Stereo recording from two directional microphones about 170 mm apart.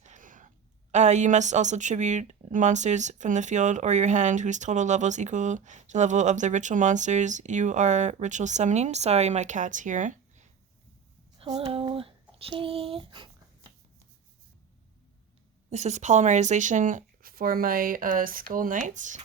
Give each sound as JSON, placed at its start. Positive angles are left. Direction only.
{"t": 0.0, "sound": "a woman's voice", "side_deg": -50}
{"t": 11.3, "sound": "a sound", "side_deg": -35}
{"t": 15.7, "sound": "a woman's voice", "side_deg": -40}